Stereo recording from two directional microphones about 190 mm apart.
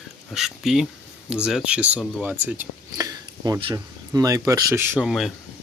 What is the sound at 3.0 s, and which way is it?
Speech, 20° right (ahead or behind).